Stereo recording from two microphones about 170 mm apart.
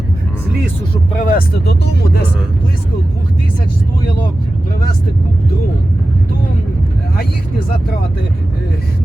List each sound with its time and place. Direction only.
1.2 s speech: 60° left (ahead or behind)